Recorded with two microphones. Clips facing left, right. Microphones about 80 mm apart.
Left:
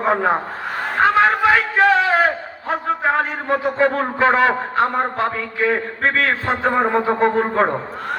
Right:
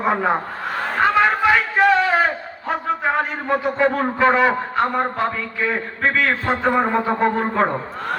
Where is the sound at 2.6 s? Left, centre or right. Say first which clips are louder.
Left 2 dB; left.